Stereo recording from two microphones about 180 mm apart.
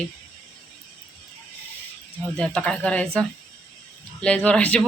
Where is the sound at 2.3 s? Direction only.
5° left (ahead or behind).